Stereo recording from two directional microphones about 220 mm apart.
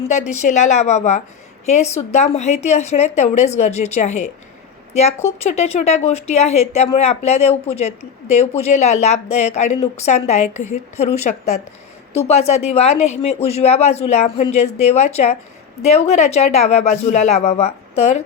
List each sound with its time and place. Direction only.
0.0 s a woman's voice: 30° left (ahead or behind)